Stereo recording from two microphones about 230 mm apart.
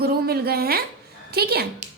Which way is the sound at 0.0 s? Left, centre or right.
Right.